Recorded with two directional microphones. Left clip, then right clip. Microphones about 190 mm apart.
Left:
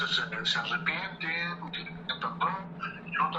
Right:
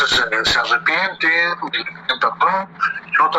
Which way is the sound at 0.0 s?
50° right (ahead or behind).